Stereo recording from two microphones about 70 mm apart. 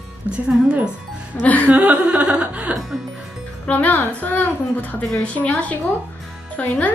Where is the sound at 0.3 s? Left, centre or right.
Centre.